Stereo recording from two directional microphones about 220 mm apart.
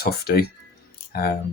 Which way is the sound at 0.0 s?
45° left (ahead or behind).